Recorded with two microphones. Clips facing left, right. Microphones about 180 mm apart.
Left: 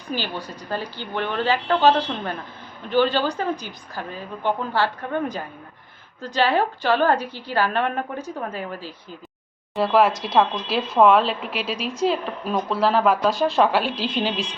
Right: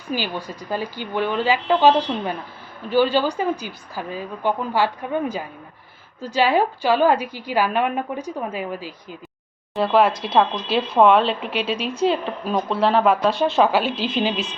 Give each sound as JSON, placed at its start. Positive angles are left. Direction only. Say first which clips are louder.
{"t": 0.1, "sound": "a woman's voice", "louder": "right 2 dB", "side_deg": -10}
{"t": 9.7, "sound": "speech", "louder": "right 1 dB", "side_deg": 0}
{"t": 10.1, "sound": "a woman's voice", "louder": "right 1 dB", "side_deg": -25}
{"t": 10.3, "sound": "speech", "louder": "right 2 dB", "side_deg": 0}